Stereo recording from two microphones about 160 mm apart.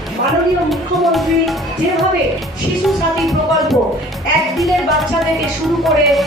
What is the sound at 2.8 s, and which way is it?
Music, centre (ahead or behind).